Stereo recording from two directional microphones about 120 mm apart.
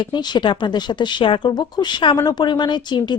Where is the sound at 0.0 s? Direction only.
40° left (ahead or behind).